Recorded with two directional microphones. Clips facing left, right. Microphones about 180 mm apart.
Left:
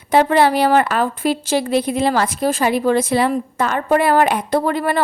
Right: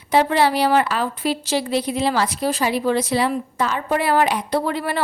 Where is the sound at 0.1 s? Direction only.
50° left (ahead or behind).